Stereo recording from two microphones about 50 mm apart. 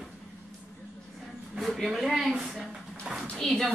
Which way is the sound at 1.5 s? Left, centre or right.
Centre.